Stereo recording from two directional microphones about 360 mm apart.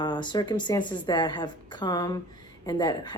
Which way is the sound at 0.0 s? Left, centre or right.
Centre.